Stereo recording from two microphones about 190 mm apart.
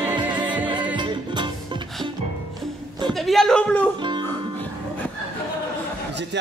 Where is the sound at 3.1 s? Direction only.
Centre (ahead or behind).